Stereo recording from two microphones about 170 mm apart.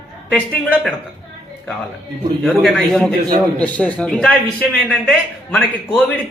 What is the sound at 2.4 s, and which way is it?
A man's voice, centre (ahead or behind).